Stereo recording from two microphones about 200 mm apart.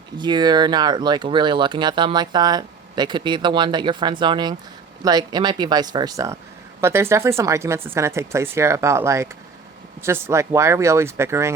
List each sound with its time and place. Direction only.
0.2 s speech: 20° right (ahead or behind)